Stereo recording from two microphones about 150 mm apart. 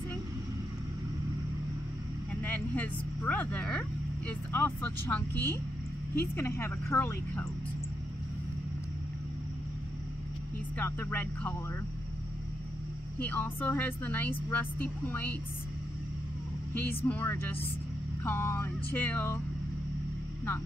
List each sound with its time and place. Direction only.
2.4 s speech: 10° left (ahead or behind)
10.8 s speech: 10° left (ahead or behind)
13.2 s speech: 10° left (ahead or behind)
16.7 s speech: 15° left (ahead or behind)